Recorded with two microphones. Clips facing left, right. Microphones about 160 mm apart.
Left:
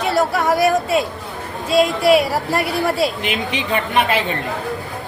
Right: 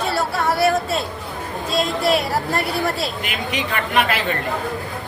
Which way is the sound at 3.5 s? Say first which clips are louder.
Even; 25° left (ahead or behind).